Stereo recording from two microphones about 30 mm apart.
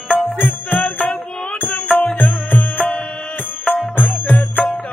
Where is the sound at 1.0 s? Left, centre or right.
Left.